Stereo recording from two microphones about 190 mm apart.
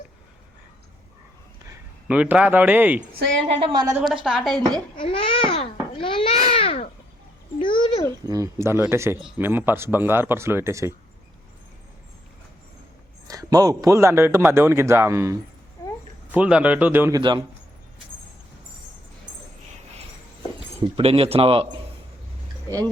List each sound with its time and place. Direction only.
2.0 s a man's voice: 10° right (ahead or behind)
3.4 s speech: 25° right (ahead or behind)
4.0 s a woman's voice: 5° right (ahead or behind)
4.9 s babbling: 25° left (ahead or behind)
7.6 s a sound: 25° left (ahead or behind)
8.3 s a man's voice: 15° right (ahead or behind)
13.2 s a man's voice: 20° right (ahead or behind)
15.8 s a sound: 20° left (ahead or behind)
16.3 s a man's voice: 5° right (ahead or behind)
20.8 s speech: 30° right (ahead or behind)